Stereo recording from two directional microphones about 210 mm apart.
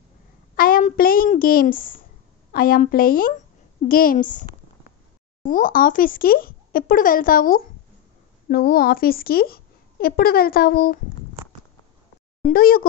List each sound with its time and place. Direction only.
0.6 s a child's voice: 40° left (ahead or behind)
12.4 s speech: 40° left (ahead or behind)